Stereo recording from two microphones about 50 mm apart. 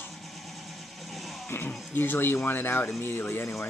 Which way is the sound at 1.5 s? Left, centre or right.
Left.